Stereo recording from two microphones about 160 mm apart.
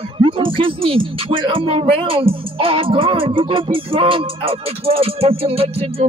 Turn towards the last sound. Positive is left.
turn(degrees=-40)  # may be behind; listen again after turning